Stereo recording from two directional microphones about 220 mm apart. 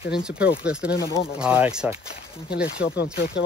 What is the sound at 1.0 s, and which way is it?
Speech, 15° left (ahead or behind).